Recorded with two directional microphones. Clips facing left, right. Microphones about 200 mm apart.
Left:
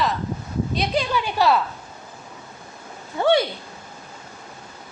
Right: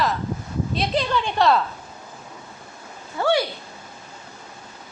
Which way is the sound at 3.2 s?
20° left (ahead or behind).